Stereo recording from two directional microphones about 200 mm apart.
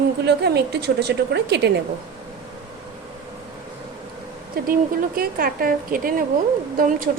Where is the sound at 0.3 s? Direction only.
55° right (ahead or behind).